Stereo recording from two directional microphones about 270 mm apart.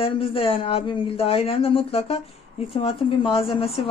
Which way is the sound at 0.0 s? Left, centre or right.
Left.